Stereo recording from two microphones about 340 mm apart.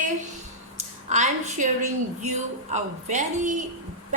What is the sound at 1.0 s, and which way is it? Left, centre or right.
A woman's voice, right.